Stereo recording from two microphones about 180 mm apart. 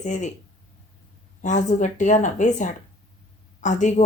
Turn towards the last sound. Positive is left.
turn(degrees=40)  # may be behind; listen again after turning